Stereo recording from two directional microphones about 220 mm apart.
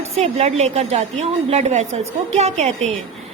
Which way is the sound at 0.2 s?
30° right (ahead or behind).